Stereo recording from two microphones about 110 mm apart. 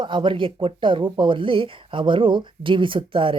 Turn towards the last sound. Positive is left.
turn(degrees=-50)  # may be behind; listen again after turning